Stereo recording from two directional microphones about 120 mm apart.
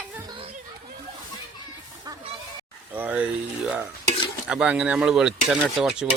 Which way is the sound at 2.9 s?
15° right (ahead or behind).